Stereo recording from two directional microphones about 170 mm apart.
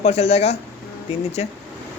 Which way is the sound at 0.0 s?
40° left (ahead or behind).